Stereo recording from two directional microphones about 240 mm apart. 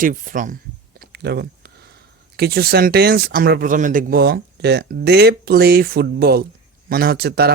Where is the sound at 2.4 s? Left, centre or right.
Right.